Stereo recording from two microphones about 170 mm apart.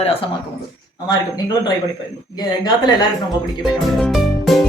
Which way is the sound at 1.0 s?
20° left (ahead or behind).